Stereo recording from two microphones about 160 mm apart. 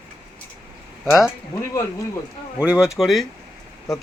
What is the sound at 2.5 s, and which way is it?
Speech, 5° right (ahead or behind).